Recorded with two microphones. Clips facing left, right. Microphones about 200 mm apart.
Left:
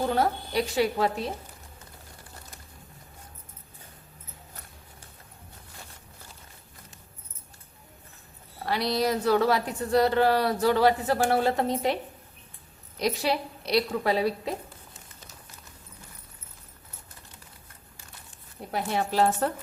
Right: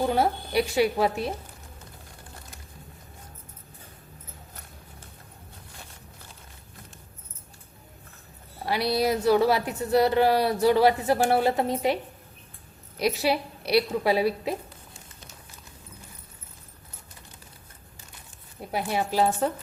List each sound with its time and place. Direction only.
0.1 s speech: 10° right (ahead or behind)
8.6 s speech: 10° right (ahead or behind)
13.0 s speech: 10° right (ahead or behind)
18.7 s a woman's voice: 5° right (ahead or behind)